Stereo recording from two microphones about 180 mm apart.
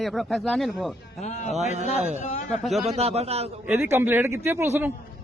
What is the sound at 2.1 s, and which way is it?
Speech, 40° left (ahead or behind).